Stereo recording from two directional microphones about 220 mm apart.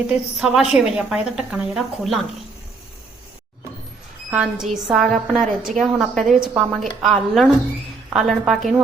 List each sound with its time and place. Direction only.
0.1 s a woman's voice: centre (ahead or behind)
4.3 s a woman's voice: 5° right (ahead or behind)